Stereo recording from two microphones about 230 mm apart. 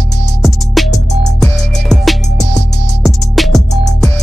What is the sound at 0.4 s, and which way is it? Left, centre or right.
Music, centre.